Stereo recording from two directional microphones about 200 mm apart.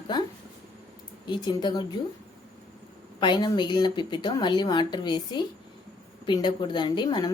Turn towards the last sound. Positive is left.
turn(degrees=20)  # may be behind; listen again after turning